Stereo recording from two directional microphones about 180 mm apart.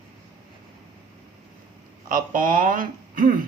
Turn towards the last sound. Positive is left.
turn(degrees=-50)  # may be behind; listen again after turning